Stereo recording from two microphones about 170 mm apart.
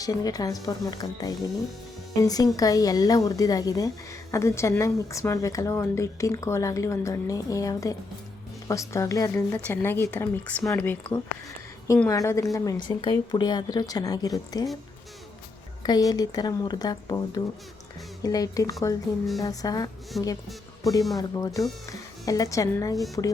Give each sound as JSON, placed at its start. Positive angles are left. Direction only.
{"t": 0.0, "sound": "a woman's voice", "side_deg": 20}
{"t": 15.8, "sound": "a woman's voice", "side_deg": 25}
{"t": 20.1, "sound": "speech", "side_deg": 0}
{"t": 21.2, "sound": "a woman's voice", "side_deg": 20}